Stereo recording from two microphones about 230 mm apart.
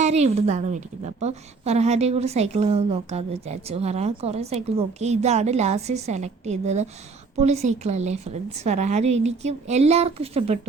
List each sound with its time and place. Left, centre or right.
0.0 s a woman's voice: right